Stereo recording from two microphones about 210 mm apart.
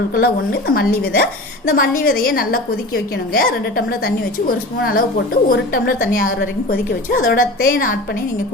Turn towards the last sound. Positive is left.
turn(degrees=45)  # may be behind; listen again after turning